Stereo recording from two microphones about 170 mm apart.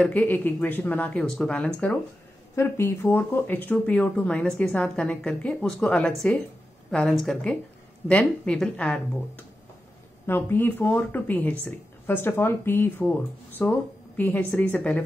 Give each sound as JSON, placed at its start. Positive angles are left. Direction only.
{"t": 0.0, "sound": "a woman's voice", "side_deg": 10}
{"t": 10.2, "sound": "speech", "side_deg": 15}